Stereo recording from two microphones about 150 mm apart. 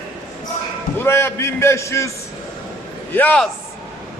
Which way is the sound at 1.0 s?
15° left (ahead or behind).